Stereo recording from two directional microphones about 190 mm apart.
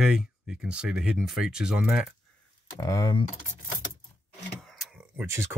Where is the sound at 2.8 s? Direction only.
20° left (ahead or behind).